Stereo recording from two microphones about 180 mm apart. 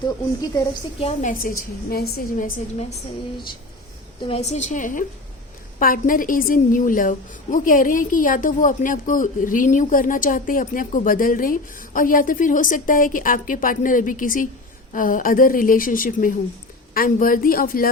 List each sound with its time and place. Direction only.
0.9 s a woman's voice: 35° left (ahead or behind)
1.3 s a woman's voice: 50° left (ahead or behind)
4.2 s a woman's voice: 35° left (ahead or behind); by 17.9 s 55° left (ahead or behind)